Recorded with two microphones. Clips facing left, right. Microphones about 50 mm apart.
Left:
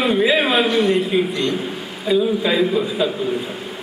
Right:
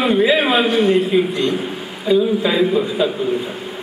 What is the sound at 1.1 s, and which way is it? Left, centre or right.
A man's voice, centre.